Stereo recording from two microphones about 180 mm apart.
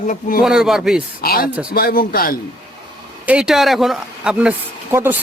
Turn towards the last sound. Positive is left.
turn(degrees=-15)  # may be behind; listen again after turning